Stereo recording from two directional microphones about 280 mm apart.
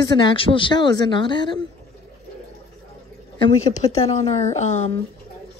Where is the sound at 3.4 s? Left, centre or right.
Left.